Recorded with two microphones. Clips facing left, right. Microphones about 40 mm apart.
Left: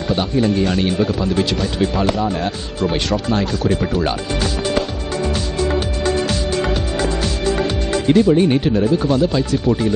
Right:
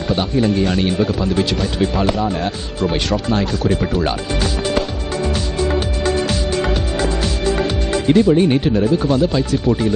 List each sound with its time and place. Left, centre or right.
0.1 s speech: centre
5.6 s music: centre